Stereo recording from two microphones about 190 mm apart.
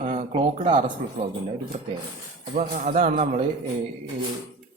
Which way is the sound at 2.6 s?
45° right (ahead or behind).